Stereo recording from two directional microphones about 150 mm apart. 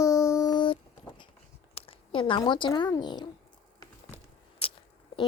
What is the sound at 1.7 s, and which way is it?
Speech, 35° left (ahead or behind).